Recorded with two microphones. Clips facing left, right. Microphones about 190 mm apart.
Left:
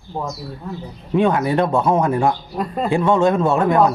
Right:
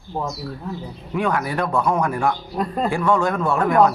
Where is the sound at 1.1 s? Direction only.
25° left (ahead or behind).